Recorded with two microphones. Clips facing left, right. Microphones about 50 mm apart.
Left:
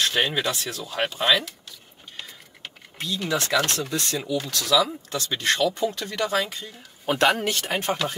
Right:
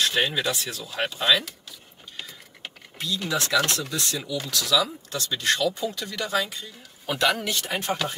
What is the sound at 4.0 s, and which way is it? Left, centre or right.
Speech, left.